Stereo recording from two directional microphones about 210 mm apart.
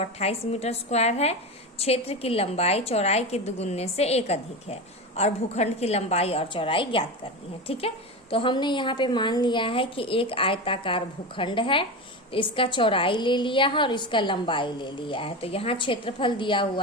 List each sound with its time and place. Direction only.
0.0 s a woman's voice: 30° left (ahead or behind)